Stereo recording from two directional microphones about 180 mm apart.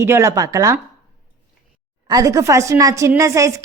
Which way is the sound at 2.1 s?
20° right (ahead or behind).